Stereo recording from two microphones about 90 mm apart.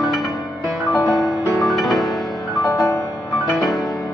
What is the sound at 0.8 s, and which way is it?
Music, 15° left (ahead or behind).